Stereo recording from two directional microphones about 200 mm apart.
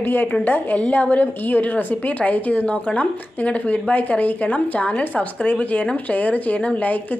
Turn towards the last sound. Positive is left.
turn(degrees=5)  # may be behind; listen again after turning